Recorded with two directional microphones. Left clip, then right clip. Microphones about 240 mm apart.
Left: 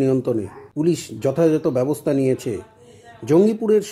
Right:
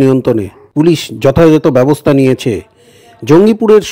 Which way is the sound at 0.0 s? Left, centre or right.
Right.